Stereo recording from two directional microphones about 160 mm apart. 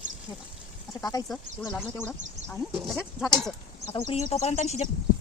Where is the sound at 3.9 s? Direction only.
35° left (ahead or behind).